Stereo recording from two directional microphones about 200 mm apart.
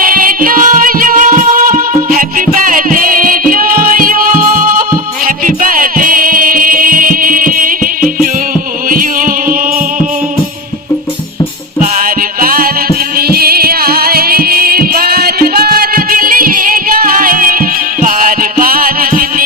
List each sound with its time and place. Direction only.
0.0 s music: 45° right (ahead or behind)
12.4 s music: 45° right (ahead or behind)